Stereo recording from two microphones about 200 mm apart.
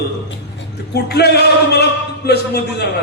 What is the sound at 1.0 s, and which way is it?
A man's voice, 55° left (ahead or behind).